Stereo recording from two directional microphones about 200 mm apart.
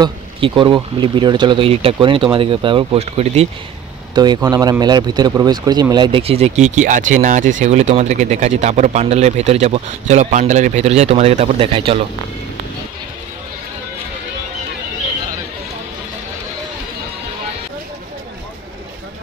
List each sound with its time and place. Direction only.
0.0 s speech: 25° right (ahead or behind)
4.1 s speech: 20° right (ahead or behind)